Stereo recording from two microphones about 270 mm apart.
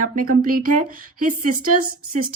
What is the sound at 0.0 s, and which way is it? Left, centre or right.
Speech, right.